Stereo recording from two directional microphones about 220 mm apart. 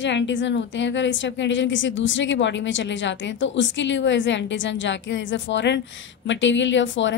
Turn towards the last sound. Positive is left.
turn(degrees=55)  # may be behind; listen again after turning